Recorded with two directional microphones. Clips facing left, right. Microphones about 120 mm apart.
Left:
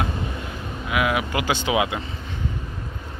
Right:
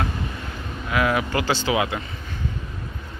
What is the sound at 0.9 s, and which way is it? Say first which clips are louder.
Speech: right 1 dB; 10° left (ahead or behind).